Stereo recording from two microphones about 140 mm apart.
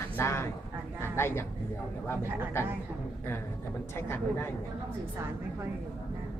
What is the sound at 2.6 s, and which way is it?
Speech, 20° left (ahead or behind).